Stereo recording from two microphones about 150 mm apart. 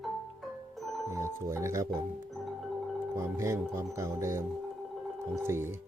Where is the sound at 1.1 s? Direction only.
20° right (ahead or behind).